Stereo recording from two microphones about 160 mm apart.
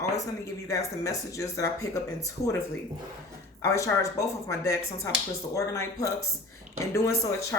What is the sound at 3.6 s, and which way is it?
Speech, 20° left (ahead or behind).